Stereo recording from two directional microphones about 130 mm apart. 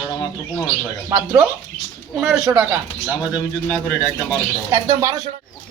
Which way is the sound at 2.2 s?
10° right (ahead or behind).